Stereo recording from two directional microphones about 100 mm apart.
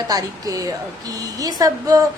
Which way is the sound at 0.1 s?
40° right (ahead or behind).